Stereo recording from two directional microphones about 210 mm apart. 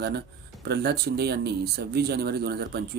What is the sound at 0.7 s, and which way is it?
Speech, 50° right (ahead or behind).